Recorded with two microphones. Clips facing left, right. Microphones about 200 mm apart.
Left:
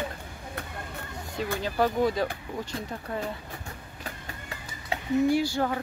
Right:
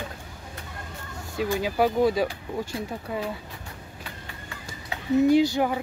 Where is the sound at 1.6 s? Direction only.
10° right (ahead or behind).